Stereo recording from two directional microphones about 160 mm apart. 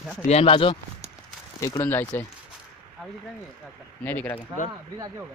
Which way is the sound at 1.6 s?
20° left (ahead or behind).